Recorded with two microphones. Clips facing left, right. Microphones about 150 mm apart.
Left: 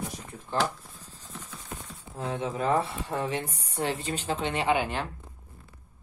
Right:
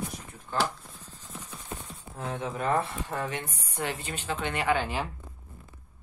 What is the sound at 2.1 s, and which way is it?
Speech, 30° left (ahead or behind).